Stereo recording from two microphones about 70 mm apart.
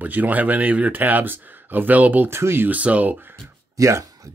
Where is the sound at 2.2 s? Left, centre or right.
Right.